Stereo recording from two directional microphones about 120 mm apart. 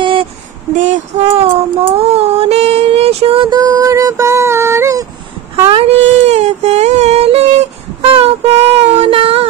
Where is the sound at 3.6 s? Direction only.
30° right (ahead or behind).